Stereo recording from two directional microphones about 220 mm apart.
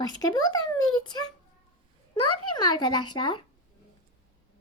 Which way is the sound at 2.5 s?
20° left (ahead or behind).